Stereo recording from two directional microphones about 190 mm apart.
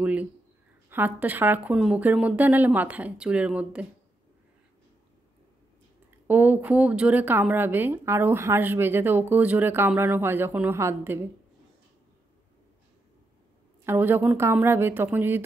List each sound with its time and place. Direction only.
0.0 s speech: 5° right (ahead or behind)
6.2 s speech: 10° right (ahead or behind)
13.8 s speech: 10° right (ahead or behind)